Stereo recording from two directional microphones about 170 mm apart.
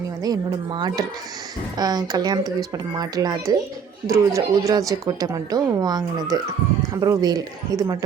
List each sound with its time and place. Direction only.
0.2 s a woman's voice: 25° right (ahead or behind)